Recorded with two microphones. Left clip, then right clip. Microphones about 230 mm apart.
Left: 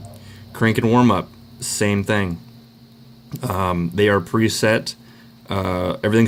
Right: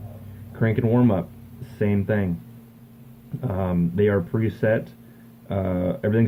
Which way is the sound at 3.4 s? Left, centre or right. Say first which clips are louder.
Left 6 dB; left.